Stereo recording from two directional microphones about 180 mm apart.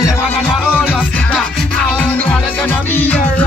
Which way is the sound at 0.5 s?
Centre (ahead or behind).